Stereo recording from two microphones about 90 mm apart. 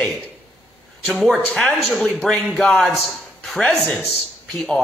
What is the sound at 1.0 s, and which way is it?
Speech, 15° left (ahead or behind).